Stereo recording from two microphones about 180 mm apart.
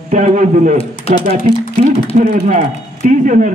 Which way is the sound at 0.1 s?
45° right (ahead or behind).